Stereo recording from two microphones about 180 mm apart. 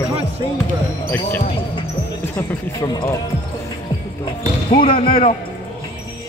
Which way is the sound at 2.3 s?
20° left (ahead or behind).